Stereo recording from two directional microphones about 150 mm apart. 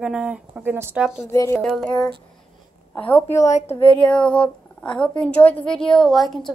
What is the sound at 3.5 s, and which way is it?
Speech, 50° left (ahead or behind).